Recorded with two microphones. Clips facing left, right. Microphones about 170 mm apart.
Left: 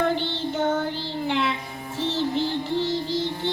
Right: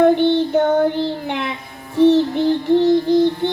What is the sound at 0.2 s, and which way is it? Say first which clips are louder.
Child singing: right 11 dB; 60° right (ahead or behind).